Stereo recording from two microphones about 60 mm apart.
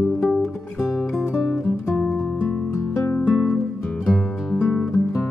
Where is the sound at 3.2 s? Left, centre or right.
Centre.